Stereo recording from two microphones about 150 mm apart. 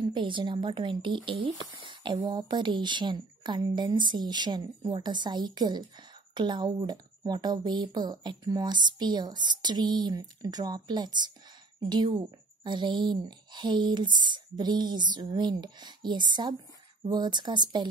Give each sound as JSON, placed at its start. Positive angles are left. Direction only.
{"t": 0.0, "sound": "speech", "side_deg": -30}